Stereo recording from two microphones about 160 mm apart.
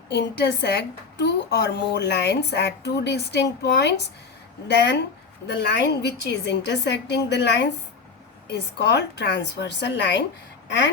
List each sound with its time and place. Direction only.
0.1 s a woman's voice: 90° left
5.5 s a woman's voice: 90° left